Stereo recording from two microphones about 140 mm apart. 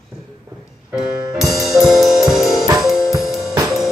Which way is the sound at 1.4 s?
Centre (ahead or behind).